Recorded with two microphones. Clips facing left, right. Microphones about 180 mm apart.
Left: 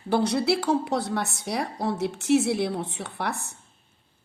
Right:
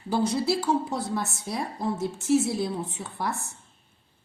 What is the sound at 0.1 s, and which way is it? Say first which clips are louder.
A woman's voice: left 2 dB; 70° left (ahead or behind).